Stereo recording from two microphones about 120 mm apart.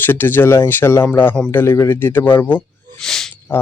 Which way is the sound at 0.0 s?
15° left (ahead or behind).